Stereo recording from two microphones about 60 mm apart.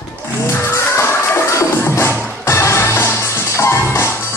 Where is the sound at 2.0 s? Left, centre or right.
Left.